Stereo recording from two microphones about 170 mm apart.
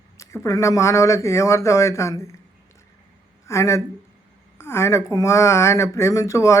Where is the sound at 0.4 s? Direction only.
20° left (ahead or behind).